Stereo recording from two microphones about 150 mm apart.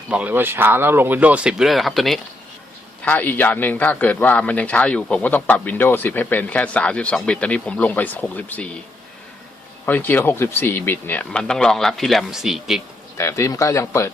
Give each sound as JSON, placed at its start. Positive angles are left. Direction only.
{"t": 0.1, "sound": "a man's voice", "side_deg": -10}
{"t": 9.8, "sound": "a man's voice", "side_deg": 10}
{"t": 13.1, "sound": "a man's voice", "side_deg": 20}